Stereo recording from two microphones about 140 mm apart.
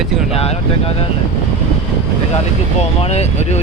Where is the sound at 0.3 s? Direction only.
45° left (ahead or behind).